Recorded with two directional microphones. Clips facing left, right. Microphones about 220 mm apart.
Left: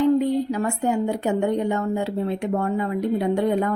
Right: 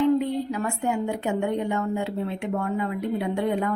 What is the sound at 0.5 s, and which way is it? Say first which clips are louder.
A woman's voice: left 4 dB; 35° left (ahead or behind).